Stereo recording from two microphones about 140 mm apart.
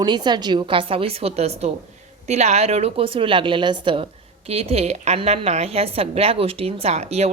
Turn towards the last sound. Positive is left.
turn(degrees=-50)  # may be behind; listen again after turning